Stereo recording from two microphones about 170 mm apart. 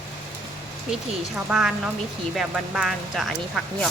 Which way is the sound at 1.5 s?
5° right (ahead or behind).